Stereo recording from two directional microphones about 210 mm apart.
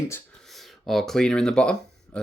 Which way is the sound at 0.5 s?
Centre (ahead or behind).